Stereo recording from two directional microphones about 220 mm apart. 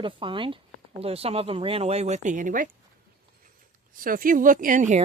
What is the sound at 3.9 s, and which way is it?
Speech, 40° right (ahead or behind).